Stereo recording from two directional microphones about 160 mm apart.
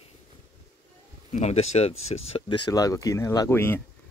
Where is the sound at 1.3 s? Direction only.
45° left (ahead or behind).